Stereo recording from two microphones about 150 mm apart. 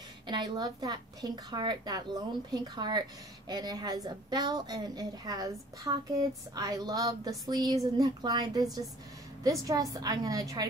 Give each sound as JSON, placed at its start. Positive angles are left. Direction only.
{"t": 0.3, "sound": "a woman's voice", "side_deg": -30}